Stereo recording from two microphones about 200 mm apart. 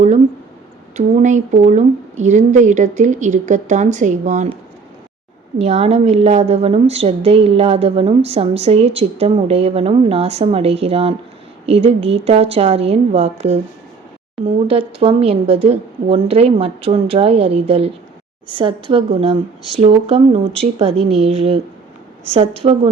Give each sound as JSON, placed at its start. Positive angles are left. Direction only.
{"t": 0.9, "sound": "a woman's voice", "side_deg": -35}
{"t": 5.6, "sound": "a woman's voice", "side_deg": -35}